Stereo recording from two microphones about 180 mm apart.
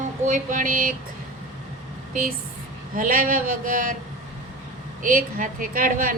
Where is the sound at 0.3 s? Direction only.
45° right (ahead or behind).